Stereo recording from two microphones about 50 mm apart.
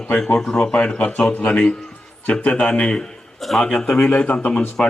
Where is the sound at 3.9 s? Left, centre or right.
Left.